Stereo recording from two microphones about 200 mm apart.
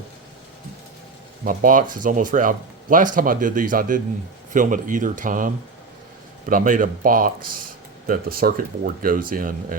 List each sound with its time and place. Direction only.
1.5 s speech: 40° right (ahead or behind)